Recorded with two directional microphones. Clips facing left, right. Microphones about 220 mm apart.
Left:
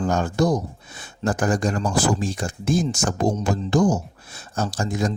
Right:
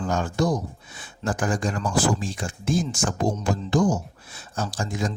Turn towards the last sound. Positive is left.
turn(degrees=40)  # may be behind; listen again after turning